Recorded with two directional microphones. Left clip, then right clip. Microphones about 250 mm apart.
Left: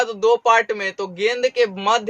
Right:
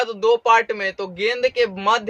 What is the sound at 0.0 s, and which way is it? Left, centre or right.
A man's voice, centre.